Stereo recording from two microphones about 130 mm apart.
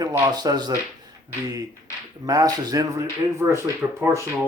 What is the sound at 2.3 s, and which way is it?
Speech, 30° right (ahead or behind).